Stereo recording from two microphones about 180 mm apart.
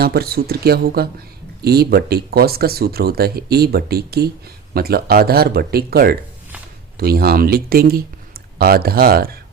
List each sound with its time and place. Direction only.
0.0 s speech: 60° right (ahead or behind)